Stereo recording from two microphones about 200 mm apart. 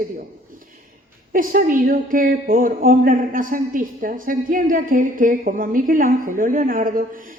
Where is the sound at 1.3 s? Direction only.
45° right (ahead or behind).